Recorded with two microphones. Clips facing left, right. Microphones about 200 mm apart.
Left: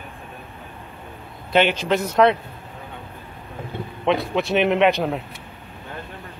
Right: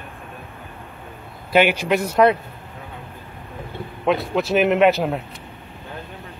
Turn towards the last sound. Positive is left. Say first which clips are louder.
# right 2 dB
turn(degrees=0)  # may be behind; listen again after turning